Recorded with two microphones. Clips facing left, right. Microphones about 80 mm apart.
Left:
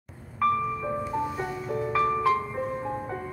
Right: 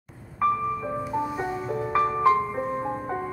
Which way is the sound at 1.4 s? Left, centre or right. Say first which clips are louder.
Right 2 dB; right.